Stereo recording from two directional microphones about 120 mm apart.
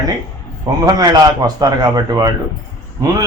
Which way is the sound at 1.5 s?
35° right (ahead or behind).